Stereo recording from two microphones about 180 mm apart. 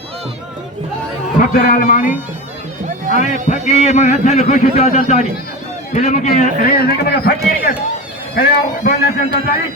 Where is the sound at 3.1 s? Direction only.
50° right (ahead or behind).